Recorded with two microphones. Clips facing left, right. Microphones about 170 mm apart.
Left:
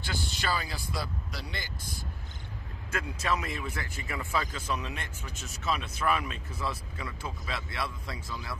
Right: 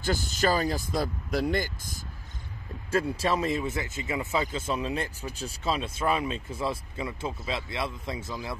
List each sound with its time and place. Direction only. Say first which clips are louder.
0.0 s speech: right 8 dB; 45° right (ahead or behind)
2.9 s speech: right 6 dB; 30° right (ahead or behind)